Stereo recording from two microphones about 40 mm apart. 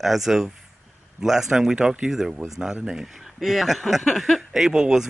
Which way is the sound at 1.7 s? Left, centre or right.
Centre.